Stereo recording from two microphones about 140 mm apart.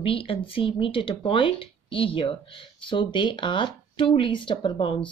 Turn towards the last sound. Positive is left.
turn(degrees=40)  # may be behind; listen again after turning